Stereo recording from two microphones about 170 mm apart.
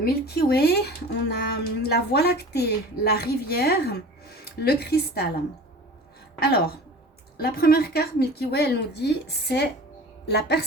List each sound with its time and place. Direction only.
0.0 s a woman's voice: 65° left (ahead or behind)
6.4 s a woman's voice: 70° left (ahead or behind)